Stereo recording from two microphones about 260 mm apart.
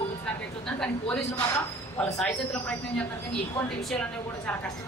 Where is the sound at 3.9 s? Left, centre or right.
Centre.